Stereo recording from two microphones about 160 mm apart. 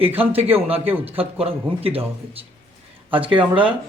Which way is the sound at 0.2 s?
35° right (ahead or behind).